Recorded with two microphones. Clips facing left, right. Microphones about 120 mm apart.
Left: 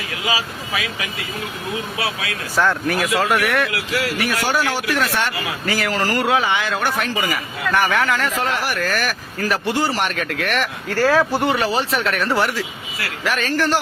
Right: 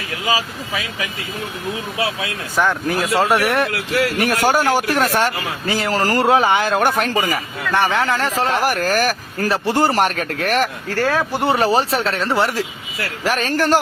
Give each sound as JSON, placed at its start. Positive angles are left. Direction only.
{"t": 2.6, "sound": "speech", "side_deg": -20}
{"t": 3.7, "sound": "speech", "side_deg": -45}
{"t": 5.6, "sound": "speech", "side_deg": -25}
{"t": 5.9, "sound": "speech", "side_deg": -35}
{"t": 7.7, "sound": "speech", "side_deg": -25}
{"t": 13.2, "sound": "speech", "side_deg": -35}